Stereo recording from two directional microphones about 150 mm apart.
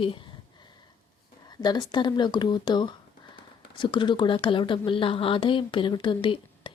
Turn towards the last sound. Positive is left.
turn(degrees=35)  # may be behind; listen again after turning